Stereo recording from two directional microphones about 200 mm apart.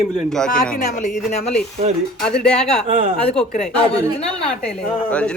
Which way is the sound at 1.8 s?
35° right (ahead or behind).